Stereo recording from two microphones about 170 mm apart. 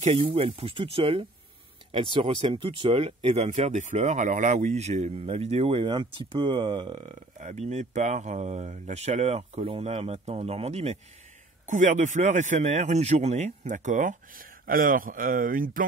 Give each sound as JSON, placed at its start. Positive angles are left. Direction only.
{"t": 0.0, "sound": "speech", "side_deg": -35}
{"t": 7.3, "sound": "speech", "side_deg": -45}